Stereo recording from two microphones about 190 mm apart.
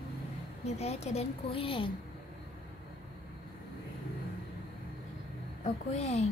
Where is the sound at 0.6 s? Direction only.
35° left (ahead or behind).